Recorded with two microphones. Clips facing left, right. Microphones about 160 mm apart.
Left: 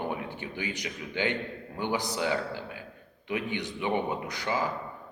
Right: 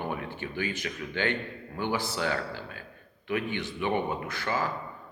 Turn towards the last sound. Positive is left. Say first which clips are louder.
# even
turn(degrees=15)  # may be behind; listen again after turning